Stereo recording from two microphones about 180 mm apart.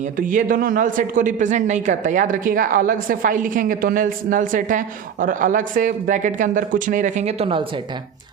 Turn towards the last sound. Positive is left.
turn(degrees=-25)  # may be behind; listen again after turning